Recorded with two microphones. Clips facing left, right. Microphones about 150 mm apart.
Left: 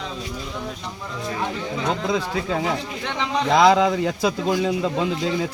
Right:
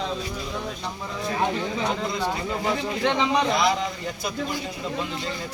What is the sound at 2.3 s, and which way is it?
A man's voice, 90° left.